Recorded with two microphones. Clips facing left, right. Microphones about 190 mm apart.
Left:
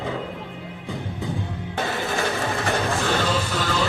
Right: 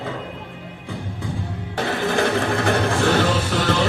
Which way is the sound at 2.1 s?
60° right (ahead or behind).